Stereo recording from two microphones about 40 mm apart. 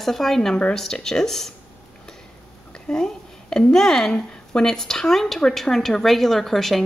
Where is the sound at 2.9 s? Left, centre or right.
Left.